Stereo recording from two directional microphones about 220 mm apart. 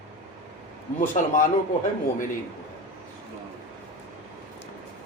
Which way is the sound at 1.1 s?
35° left (ahead or behind).